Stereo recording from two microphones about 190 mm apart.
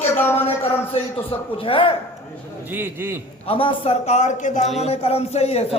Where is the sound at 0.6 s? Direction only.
30° left (ahead or behind).